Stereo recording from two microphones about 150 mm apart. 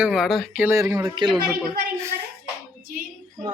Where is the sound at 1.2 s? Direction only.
30° right (ahead or behind).